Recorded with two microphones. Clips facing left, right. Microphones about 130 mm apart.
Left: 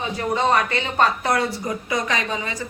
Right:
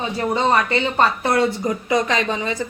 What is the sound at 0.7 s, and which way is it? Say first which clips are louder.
Speech: right 2 dB; 30° right (ahead or behind).